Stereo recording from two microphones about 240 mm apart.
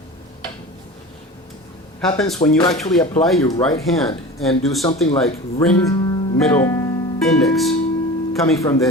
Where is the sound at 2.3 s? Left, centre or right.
Centre.